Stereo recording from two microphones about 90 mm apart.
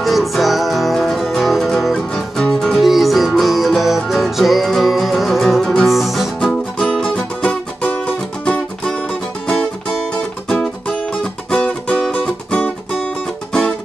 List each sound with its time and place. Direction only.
0.0 s music: centre (ahead or behind)
11.5 s music: 10° left (ahead or behind)